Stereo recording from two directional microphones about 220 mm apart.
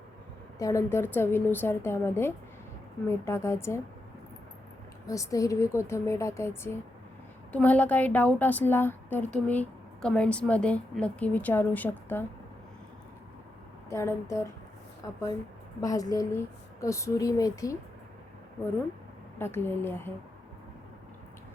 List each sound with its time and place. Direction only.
0.6 s a woman's voice: 15° left (ahead or behind)
5.0 s a woman's voice: 15° left (ahead or behind)
13.9 s a woman's voice: 15° left (ahead or behind)
15.8 s a woman's voice: 15° left (ahead or behind)
19.4 s a woman's voice: 10° left (ahead or behind)